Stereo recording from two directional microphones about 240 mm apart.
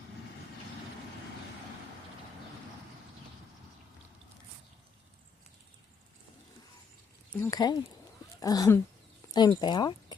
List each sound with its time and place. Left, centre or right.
7.4 s speech: centre